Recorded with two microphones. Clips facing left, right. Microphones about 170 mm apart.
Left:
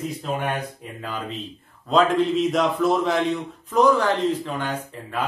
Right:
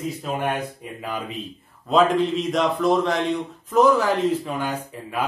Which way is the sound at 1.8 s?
Centre (ahead or behind).